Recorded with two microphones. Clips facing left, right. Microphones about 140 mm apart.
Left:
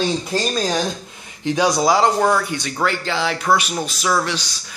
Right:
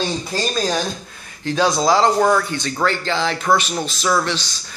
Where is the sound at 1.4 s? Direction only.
15° left (ahead or behind).